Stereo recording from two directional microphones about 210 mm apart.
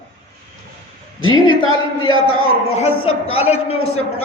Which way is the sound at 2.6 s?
30° left (ahead or behind).